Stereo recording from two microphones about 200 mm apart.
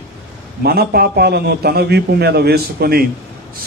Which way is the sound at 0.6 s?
50° right (ahead or behind).